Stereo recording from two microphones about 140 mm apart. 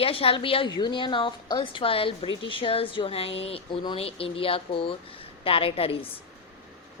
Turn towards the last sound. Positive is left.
turn(degrees=40)  # may be behind; listen again after turning